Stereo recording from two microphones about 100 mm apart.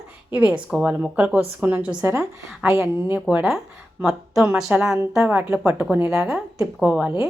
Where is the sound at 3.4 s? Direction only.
5° right (ahead or behind).